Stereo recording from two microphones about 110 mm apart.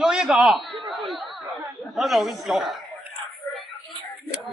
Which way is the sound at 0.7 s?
50° right (ahead or behind).